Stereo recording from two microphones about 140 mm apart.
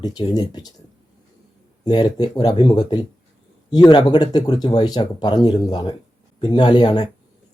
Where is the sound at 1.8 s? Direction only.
30° left (ahead or behind).